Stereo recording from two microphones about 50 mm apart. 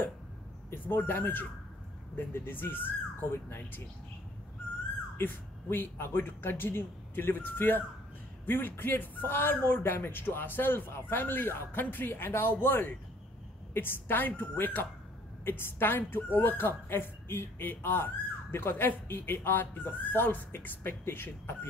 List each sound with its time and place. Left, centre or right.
0.8 s a woman's voice: left
5.1 s a woman's voice: left